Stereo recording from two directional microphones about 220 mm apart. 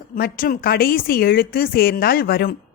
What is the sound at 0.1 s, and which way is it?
Speech, 40° left (ahead or behind).